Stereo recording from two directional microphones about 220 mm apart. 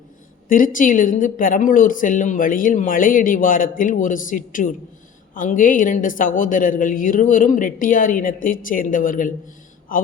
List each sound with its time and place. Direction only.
0.4 s speech: 40° left (ahead or behind)